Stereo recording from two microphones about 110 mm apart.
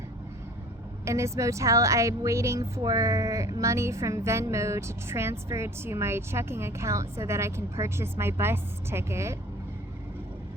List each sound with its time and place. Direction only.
1.0 s a woman's voice: 25° right (ahead or behind)